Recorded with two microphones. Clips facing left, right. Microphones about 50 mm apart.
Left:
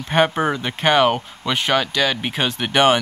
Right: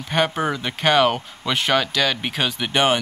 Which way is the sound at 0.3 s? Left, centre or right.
Centre.